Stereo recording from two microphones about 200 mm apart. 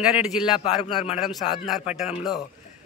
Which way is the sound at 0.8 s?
30° left (ahead or behind).